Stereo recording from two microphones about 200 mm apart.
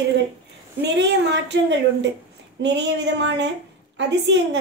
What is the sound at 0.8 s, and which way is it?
A woman's voice, 60° right (ahead or behind).